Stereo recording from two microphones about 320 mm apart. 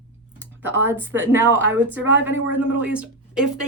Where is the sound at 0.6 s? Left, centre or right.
Centre.